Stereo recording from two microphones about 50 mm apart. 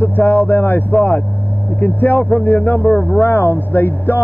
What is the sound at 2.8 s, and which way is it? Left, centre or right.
Speech, left.